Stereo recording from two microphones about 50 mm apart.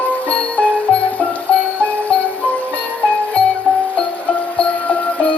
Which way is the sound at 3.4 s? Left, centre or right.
Left.